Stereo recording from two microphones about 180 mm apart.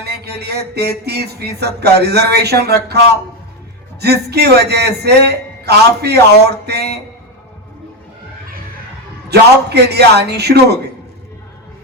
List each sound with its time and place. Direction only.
0.0 s speech: 65° right (ahead or behind)
4.0 s speech: 65° right (ahead or behind)
9.3 s speech: 65° right (ahead or behind)